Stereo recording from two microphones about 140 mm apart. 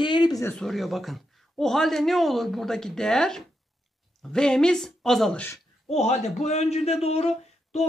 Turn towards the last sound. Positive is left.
turn(degrees=50)  # may be behind; listen again after turning